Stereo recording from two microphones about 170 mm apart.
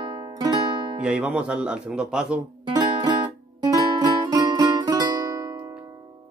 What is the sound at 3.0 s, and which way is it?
Music, 25° right (ahead or behind).